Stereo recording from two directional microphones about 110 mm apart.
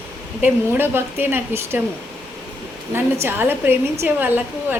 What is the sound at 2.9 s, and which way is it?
A woman's voice, 20° right (ahead or behind).